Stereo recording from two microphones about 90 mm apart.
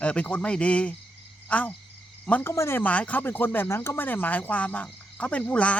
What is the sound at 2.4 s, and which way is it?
Speech, 30° left (ahead or behind).